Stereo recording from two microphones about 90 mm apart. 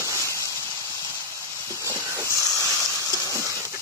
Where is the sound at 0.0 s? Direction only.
35° left (ahead or behind).